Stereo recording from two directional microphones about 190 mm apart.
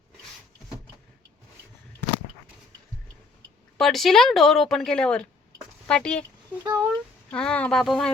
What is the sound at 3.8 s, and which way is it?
A woman's voice, centre (ahead or behind).